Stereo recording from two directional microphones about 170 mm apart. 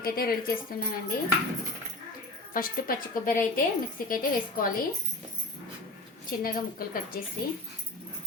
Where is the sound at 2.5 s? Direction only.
55° left (ahead or behind).